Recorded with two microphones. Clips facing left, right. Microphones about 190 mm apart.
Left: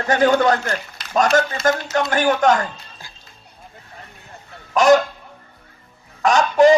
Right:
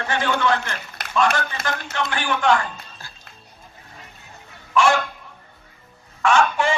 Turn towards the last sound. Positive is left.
turn(degrees=40)  # may be behind; listen again after turning